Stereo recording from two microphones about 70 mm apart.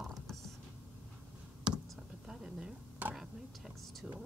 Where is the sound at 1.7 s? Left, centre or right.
Centre.